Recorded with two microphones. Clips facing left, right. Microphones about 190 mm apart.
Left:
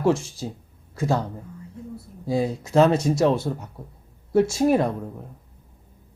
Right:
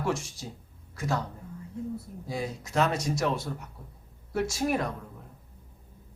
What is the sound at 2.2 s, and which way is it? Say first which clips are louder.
Speech: left 12 dB; 30° left (ahead or behind).